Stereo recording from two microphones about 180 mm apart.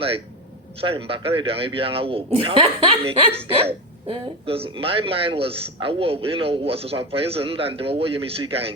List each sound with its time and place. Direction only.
0.8 s a man's voice: 30° right (ahead or behind)